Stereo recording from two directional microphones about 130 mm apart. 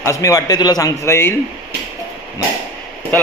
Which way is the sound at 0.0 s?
25° left (ahead or behind).